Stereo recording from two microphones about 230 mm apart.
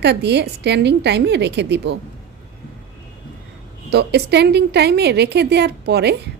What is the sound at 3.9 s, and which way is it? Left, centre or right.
A woman's voice, right.